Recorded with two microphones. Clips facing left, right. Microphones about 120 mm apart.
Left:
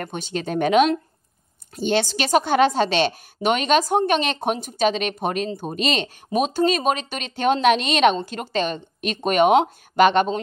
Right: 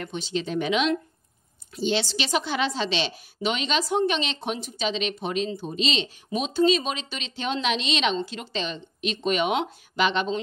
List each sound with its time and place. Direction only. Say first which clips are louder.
0.0 s speech: left 2 dB; 50° left (ahead or behind)